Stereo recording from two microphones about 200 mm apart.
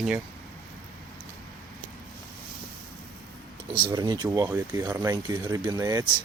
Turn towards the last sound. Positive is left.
turn(degrees=-15)  # may be behind; listen again after turning